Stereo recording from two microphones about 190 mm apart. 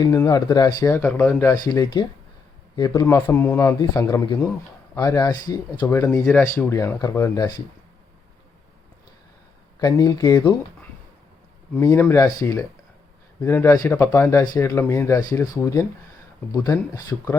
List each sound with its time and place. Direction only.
0.0 s speech: 20° left (ahead or behind)
9.8 s speech: 20° left (ahead or behind)
11.8 s speech: 15° left (ahead or behind)